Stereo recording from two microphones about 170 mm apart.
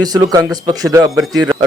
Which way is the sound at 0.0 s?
20° right (ahead or behind).